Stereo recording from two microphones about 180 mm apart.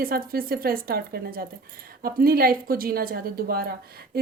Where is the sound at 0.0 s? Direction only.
55° right (ahead or behind).